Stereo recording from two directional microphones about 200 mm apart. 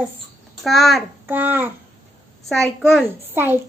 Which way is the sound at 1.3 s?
10° right (ahead or behind).